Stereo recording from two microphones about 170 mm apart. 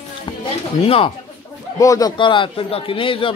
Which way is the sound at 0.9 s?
35° left (ahead or behind).